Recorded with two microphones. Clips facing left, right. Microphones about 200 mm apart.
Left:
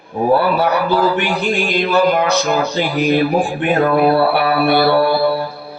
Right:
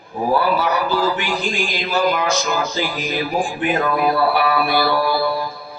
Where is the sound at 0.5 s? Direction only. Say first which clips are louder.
Left 4 dB; 60° left (ahead or behind).